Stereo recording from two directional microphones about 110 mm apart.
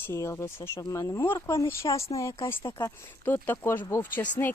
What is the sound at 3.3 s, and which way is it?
Speech, 20° left (ahead or behind).